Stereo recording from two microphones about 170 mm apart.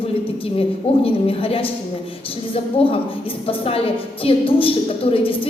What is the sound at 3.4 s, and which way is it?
A woman's voice, 35° left (ahead or behind).